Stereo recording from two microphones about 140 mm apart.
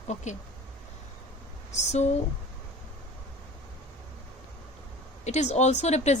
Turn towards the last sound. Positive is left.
turn(degrees=55)  # may be behind; listen again after turning